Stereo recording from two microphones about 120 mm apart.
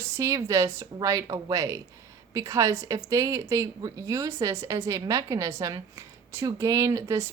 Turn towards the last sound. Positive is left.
turn(degrees=-25)  # may be behind; listen again after turning